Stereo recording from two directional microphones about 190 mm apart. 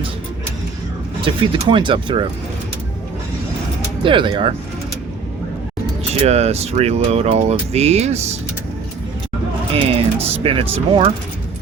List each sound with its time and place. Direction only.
1.2 s speech: 25° right (ahead or behind)
4.0 s speech: 25° right (ahead or behind)
6.2 s speech: 35° right (ahead or behind)
9.7 s speech: 30° right (ahead or behind)